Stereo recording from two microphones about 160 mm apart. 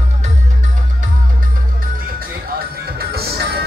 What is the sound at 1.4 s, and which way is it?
Music, 60° right (ahead or behind).